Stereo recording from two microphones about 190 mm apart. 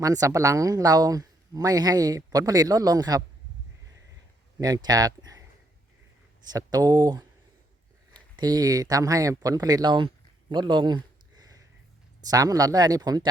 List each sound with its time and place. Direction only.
0.0 s a woman's voice: 20° right (ahead or behind)
4.6 s speech: 20° right (ahead or behind)
6.5 s a woman's voice: 20° right (ahead or behind)
8.4 s a woman's voice: 20° right (ahead or behind)
10.5 s a sound: 25° right (ahead or behind)
12.3 s a woman's voice: 20° right (ahead or behind)